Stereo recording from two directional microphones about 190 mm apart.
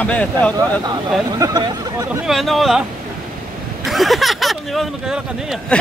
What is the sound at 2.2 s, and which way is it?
Speech, centre (ahead or behind).